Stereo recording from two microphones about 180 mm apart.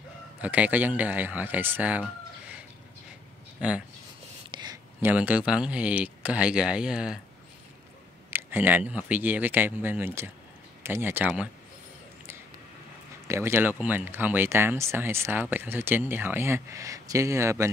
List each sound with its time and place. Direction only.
0.4 s speech: 10° right (ahead or behind)
4.5 s a sound: 25° right (ahead or behind)
5.0 s speech: 10° right (ahead or behind)
8.3 s speech: 10° right (ahead or behind)
13.3 s speech: 15° right (ahead or behind)